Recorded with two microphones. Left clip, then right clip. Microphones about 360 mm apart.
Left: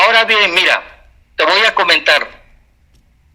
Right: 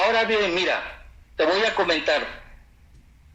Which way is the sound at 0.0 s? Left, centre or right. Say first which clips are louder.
Left 10 dB; left.